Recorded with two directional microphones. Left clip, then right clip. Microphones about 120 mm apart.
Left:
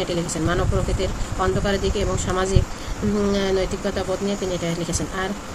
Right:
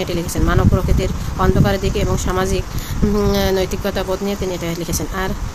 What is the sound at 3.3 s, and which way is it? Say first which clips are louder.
Speech: right 2 dB; 65° right (ahead or behind).